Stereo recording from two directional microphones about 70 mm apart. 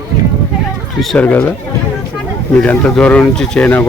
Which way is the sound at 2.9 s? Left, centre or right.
Centre.